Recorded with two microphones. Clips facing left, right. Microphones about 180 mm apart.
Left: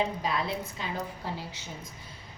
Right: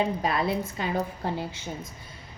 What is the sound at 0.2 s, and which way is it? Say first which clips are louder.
A woman's voice: right 5 dB; 55° right (ahead or behind).